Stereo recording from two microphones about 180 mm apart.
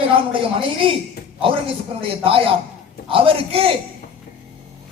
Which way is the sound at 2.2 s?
30° right (ahead or behind).